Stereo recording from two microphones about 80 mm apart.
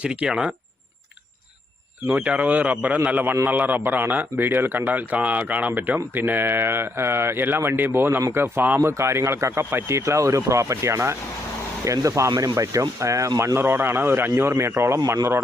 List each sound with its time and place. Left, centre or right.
0.0 s speech: centre
2.0 s speech: centre; by 15.4 s right